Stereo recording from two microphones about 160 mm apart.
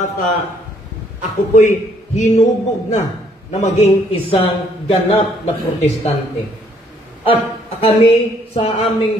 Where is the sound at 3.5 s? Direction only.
40° left (ahead or behind).